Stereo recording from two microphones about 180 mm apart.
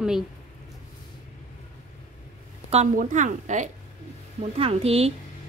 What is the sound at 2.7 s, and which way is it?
A woman's voice, 40° right (ahead or behind).